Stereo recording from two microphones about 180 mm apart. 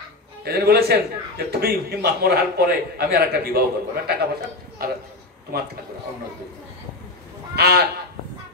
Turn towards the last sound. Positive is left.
turn(degrees=-60)  # may be behind; listen again after turning